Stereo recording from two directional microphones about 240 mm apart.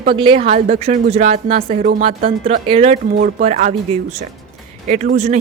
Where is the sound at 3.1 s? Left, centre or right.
Right.